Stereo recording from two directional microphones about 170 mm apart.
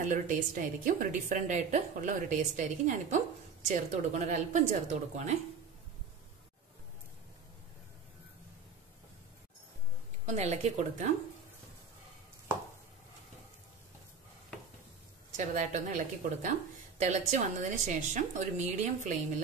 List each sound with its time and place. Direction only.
0.0 s a woman's voice: 50° right (ahead or behind)
10.2 s a woman's voice: 40° right (ahead or behind)
15.3 s a woman's voice: 45° right (ahead or behind)